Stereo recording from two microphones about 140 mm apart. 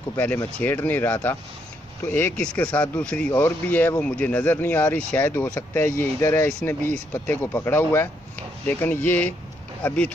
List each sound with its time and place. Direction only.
0.1 s speech: 15° left (ahead or behind)